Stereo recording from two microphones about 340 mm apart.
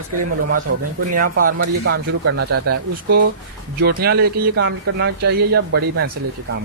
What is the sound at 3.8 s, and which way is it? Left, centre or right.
Speech, right.